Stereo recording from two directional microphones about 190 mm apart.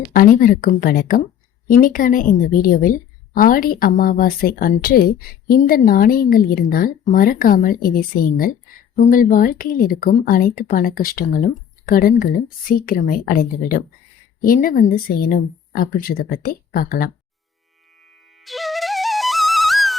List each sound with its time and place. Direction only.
0.1 s a woman's voice: 45° left (ahead or behind)
18.3 s flute: centre (ahead or behind)